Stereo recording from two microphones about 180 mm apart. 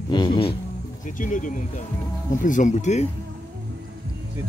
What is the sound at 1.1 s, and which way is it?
Speech, 45° left (ahead or behind).